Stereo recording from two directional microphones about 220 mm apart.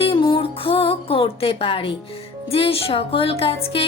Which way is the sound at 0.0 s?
25° left (ahead or behind).